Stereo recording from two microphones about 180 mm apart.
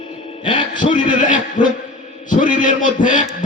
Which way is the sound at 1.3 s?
45° left (ahead or behind).